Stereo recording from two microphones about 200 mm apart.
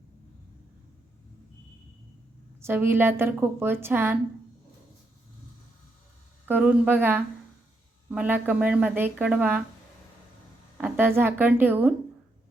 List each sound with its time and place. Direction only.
2.6 s a woman's voice: 10° right (ahead or behind)
6.4 s a woman's voice: 10° right (ahead or behind)
10.8 s a woman's voice: 10° right (ahead or behind)